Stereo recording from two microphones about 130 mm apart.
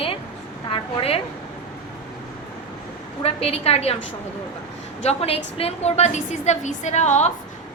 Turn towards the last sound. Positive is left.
turn(degrees=60)  # may be behind; listen again after turning